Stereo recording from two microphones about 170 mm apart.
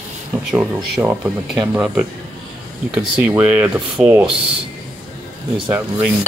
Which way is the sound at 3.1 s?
10° right (ahead or behind).